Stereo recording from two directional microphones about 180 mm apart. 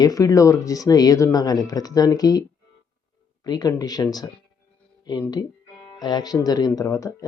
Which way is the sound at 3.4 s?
20° left (ahead or behind).